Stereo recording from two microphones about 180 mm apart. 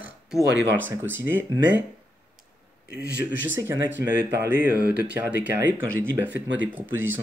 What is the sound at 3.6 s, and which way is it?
Speech, 15° right (ahead or behind).